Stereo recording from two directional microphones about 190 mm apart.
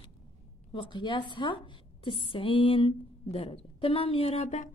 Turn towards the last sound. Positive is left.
turn(degrees=35)  # may be behind; listen again after turning